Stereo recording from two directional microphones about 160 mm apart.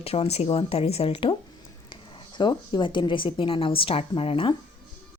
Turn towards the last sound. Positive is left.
turn(degrees=35)  # may be behind; listen again after turning